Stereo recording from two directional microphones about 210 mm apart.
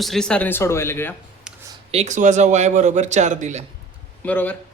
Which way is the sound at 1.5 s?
5° right (ahead or behind).